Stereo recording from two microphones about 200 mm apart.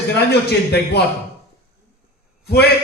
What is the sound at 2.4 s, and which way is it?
Speech, 50° left (ahead or behind).